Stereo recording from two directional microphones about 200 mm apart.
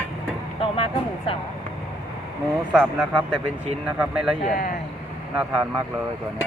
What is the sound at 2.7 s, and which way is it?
Speech, centre (ahead or behind).